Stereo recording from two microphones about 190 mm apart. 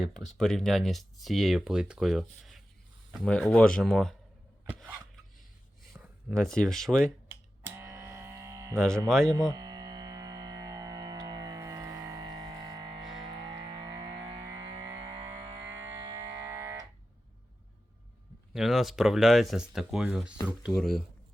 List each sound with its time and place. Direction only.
0.3 s speech: centre (ahead or behind)
6.0 s speech: centre (ahead or behind)
7.3 s a sound: 15° right (ahead or behind)
9.0 s speech: 5° left (ahead or behind)
9.3 s music: 15° right (ahead or behind)
18.5 s speech: centre (ahead or behind)